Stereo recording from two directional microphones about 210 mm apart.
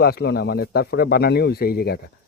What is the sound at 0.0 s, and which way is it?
Speech, 50° left (ahead or behind).